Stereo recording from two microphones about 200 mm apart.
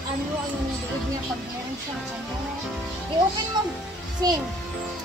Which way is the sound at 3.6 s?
20° right (ahead or behind).